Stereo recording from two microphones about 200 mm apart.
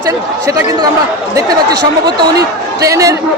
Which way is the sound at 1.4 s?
20° right (ahead or behind).